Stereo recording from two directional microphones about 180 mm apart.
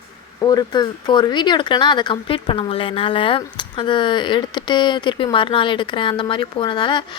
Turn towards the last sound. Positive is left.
turn(degrees=25)  # may be behind; listen again after turning